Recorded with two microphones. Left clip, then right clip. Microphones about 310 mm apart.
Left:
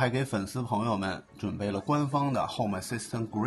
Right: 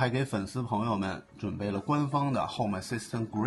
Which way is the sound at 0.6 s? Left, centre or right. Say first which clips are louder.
Left 1 dB; left.